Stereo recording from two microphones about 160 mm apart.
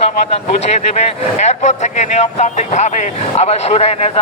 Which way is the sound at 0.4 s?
45° left (ahead or behind).